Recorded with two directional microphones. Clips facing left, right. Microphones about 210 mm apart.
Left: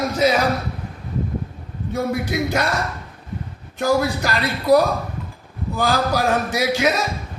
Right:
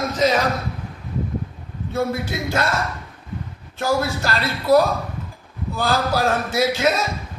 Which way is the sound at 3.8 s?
15° left (ahead or behind).